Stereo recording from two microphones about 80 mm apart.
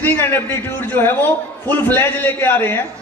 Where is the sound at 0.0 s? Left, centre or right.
Left.